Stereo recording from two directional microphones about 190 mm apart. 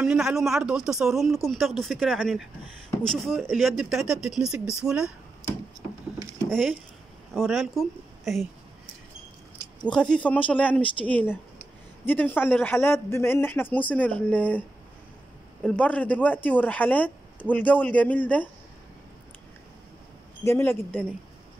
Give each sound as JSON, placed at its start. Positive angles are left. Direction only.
{"t": 0.0, "sound": "speech", "side_deg": 0}
{"t": 6.5, "sound": "speech", "side_deg": 0}
{"t": 9.6, "sound": "a sound", "side_deg": 20}
{"t": 9.9, "sound": "a man's voice", "side_deg": 5}
{"t": 12.1, "sound": "a man's voice", "side_deg": 10}
{"t": 15.6, "sound": "a man's voice", "side_deg": 5}
{"t": 20.4, "sound": "a man's voice", "side_deg": 10}